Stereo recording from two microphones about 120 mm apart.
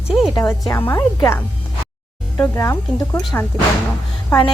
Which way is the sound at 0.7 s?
20° left (ahead or behind).